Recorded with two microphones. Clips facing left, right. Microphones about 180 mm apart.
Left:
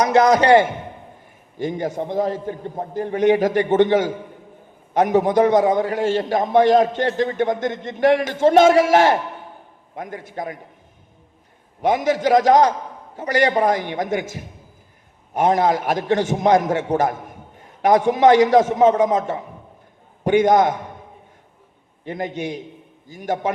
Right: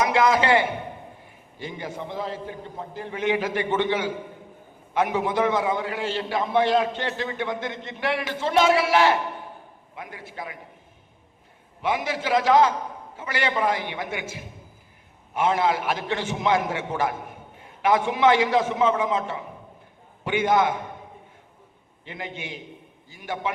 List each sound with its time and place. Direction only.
0.0 s a man's voice: 40° left (ahead or behind)
11.8 s a man's voice: 45° left (ahead or behind)
22.0 s a man's voice: 45° left (ahead or behind)